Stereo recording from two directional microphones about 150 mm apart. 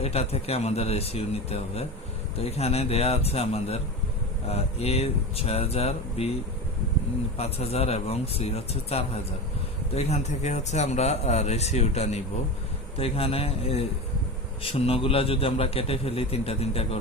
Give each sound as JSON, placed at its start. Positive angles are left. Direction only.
{"t": 0.0, "sound": "a man's voice", "side_deg": 40}
{"t": 7.3, "sound": "a man's voice", "side_deg": 45}